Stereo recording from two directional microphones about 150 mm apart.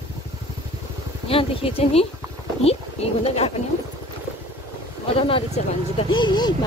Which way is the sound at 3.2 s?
45° left (ahead or behind).